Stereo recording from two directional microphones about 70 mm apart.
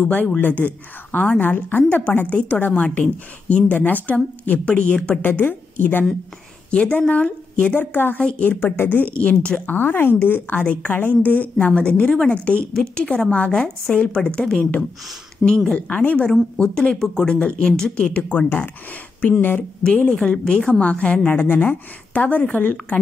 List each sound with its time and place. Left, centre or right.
0.4 s a woman's voice: left
6.7 s a woman's voice: centre
8.2 s speech: centre
8.5 s a woman's voice: left
9.8 s a woman's voice: left; by 17.4 s centre
17.4 s speech: centre
19.8 s a woman's voice: centre